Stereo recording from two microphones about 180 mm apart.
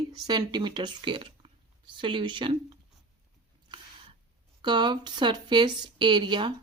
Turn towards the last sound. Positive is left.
turn(degrees=-25)  # may be behind; listen again after turning